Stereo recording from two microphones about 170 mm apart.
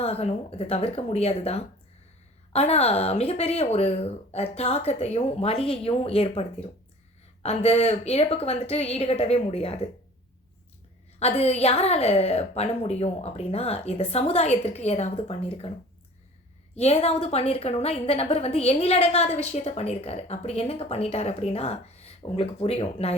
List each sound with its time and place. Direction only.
0.0 s a woman's voice: 35° left (ahead or behind)
11.2 s a woman's voice: 40° left (ahead or behind)
16.7 s a woman's voice: 40° left (ahead or behind)